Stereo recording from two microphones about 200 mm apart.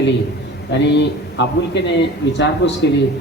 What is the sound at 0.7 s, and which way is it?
A man's voice, 60° left (ahead or behind).